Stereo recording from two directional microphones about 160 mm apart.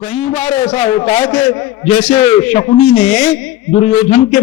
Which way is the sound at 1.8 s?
40° left (ahead or behind).